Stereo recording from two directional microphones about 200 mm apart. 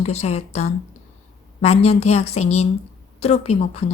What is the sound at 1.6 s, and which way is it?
A woman's voice, 30° left (ahead or behind).